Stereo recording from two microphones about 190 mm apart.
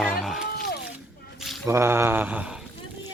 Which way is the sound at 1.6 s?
15° right (ahead or behind).